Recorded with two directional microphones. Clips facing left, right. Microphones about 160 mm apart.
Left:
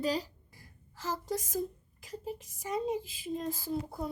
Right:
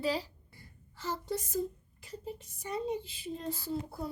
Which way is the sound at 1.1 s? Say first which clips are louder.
Even; 90° left.